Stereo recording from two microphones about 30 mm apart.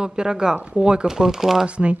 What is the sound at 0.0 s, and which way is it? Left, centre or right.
Speech, right.